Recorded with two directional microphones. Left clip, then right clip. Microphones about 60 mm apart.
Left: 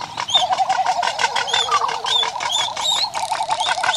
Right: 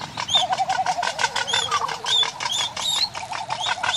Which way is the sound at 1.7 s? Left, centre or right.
Left.